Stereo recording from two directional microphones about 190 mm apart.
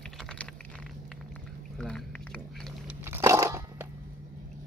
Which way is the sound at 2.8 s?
10° right (ahead or behind).